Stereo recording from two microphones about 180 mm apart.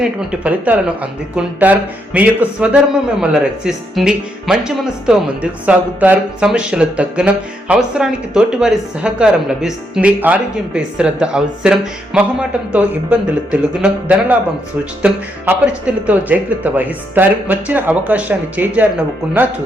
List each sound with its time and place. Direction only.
0.0 s speech: 5° right (ahead or behind)